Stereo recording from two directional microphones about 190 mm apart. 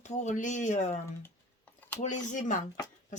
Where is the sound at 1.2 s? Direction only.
10° left (ahead or behind).